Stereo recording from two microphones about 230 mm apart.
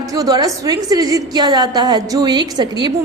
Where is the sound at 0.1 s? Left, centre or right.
Centre.